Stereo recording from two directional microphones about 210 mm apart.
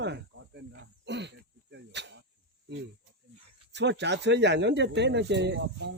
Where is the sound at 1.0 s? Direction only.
55° right (ahead or behind).